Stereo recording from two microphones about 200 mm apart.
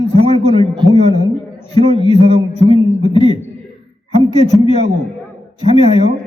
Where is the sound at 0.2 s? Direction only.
30° right (ahead or behind).